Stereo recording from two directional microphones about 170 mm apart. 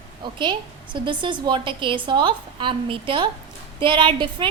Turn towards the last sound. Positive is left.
turn(degrees=-30)  # may be behind; listen again after turning